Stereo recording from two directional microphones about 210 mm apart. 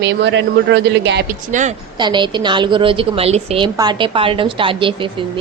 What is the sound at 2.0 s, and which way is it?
A woman's voice, 20° right (ahead or behind).